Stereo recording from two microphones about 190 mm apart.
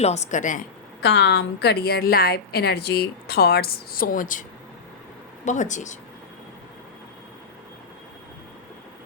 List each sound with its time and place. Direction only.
0.0 s a woman's voice: 35° left (ahead or behind)
1.0 s a woman's voice: 65° left (ahead or behind); by 4.4 s 45° left (ahead or behind)
5.5 s a woman's voice: 40° left (ahead or behind)